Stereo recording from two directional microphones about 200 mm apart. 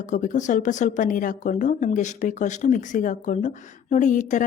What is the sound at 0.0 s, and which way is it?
Speech, 40° left (ahead or behind).